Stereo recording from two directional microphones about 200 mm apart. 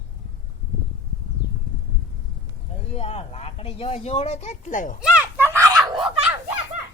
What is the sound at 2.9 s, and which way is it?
Speech, 30° left (ahead or behind).